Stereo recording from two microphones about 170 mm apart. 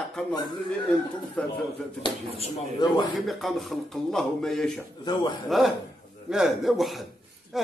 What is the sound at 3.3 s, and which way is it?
A man's voice, centre (ahead or behind).